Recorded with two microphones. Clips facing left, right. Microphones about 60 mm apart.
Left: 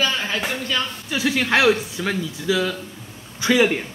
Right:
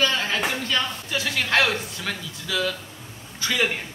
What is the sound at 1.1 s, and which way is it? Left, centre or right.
A man's voice, centre.